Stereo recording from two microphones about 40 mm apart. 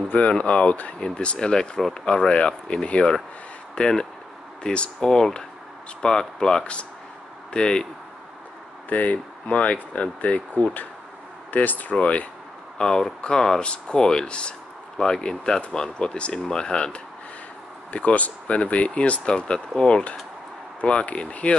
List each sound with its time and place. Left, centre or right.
0.4 s speech: left
6.0 s speech: centre
6.6 s speech: left
8.8 s speech: left
12.0 s speech: left
12.7 s speech: centre
15.0 s speech: centre
17.9 s speech: left